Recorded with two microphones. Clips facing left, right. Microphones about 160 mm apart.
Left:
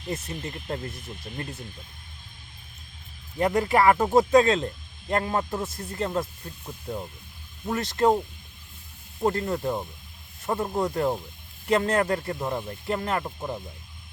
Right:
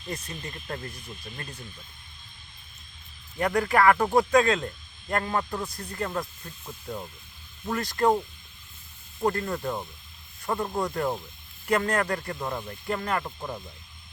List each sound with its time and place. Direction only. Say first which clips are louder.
0.1 s speech: left 4 dB; 25° left (ahead or behind)
3.3 s speech: left 2 dB; 20° left (ahead or behind)
6.4 s speech: left 2 dB; 15° left (ahead or behind)
9.2 s speech: left 2 dB; 20° left (ahead or behind)